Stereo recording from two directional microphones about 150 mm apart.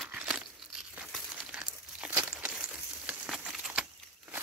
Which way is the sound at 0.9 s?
5° right (ahead or behind).